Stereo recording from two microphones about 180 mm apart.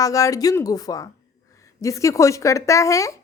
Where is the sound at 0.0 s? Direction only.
20° left (ahead or behind).